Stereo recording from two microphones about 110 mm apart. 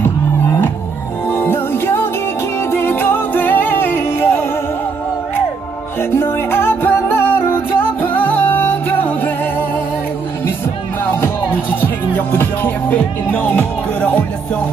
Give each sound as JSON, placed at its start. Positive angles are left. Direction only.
{"t": 0.0, "sound": "music", "side_deg": 20}
{"t": 5.9, "sound": "music", "side_deg": 20}
{"t": 11.1, "sound": "music", "side_deg": 20}